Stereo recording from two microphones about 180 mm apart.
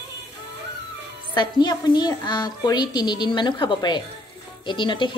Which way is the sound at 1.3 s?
25° left (ahead or behind).